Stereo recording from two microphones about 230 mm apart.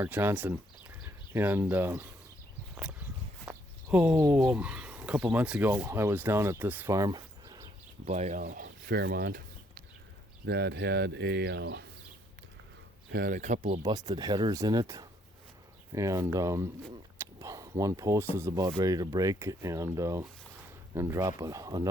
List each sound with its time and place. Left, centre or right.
0.0 s speech: centre
3.4 s speech: centre
8.0 s speech: right
13.1 s speech: right
13.8 s speech: centre